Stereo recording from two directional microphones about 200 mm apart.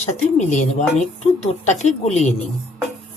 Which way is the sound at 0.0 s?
35° left (ahead or behind).